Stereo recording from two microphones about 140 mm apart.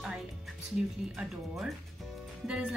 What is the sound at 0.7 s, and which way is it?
Speech, 5° right (ahead or behind).